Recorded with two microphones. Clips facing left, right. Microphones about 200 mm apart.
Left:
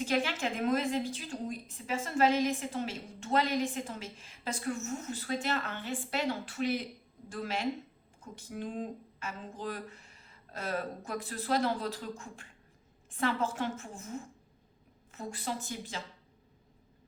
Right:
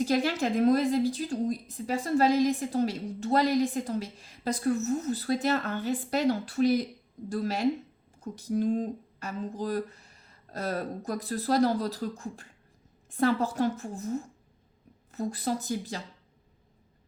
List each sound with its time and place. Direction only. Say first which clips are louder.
0.0 s a woman's voice: right 5 dB; 40° right (ahead or behind)